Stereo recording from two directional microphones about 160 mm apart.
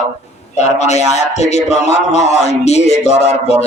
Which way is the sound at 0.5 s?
45° left (ahead or behind).